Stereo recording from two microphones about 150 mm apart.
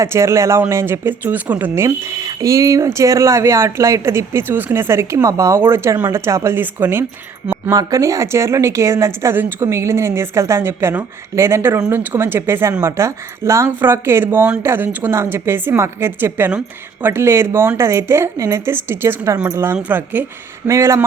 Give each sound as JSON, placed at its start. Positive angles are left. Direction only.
{"t": 0.0, "sound": "speech", "side_deg": -20}
{"t": 7.7, "sound": "speech", "side_deg": -25}